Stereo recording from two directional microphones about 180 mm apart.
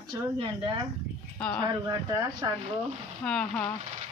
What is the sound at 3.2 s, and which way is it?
Speech, 5° left (ahead or behind).